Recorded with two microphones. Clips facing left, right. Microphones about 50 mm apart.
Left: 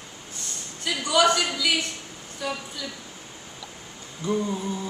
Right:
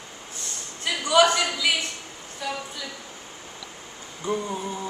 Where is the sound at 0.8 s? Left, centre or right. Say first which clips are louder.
Right 2 dB; right.